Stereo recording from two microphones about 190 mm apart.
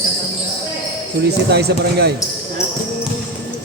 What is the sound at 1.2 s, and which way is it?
Speech, 60° right (ahead or behind).